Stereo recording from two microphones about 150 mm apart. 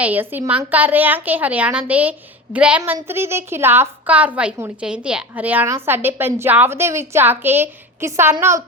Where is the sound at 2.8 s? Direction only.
20° right (ahead or behind).